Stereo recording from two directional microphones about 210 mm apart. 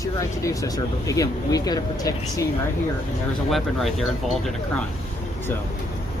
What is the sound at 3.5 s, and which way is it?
Speech, centre (ahead or behind).